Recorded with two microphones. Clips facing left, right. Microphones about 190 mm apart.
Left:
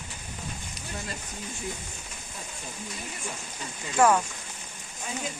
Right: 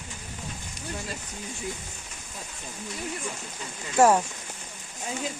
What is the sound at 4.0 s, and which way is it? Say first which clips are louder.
Speech: right 2 dB; 25° right (ahead or behind).